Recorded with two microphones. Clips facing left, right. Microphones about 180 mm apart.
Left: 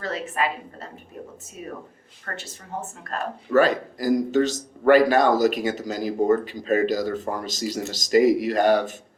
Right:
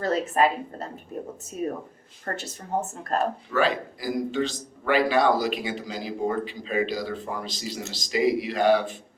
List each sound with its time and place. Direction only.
0.0 s speech: 40° right (ahead or behind)
3.5 s a man's voice: 45° left (ahead or behind)